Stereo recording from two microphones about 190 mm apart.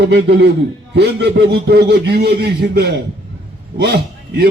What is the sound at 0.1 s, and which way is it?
A man's voice, 60° right (ahead or behind).